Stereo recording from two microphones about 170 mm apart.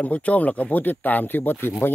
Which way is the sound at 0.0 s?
10° left (ahead or behind).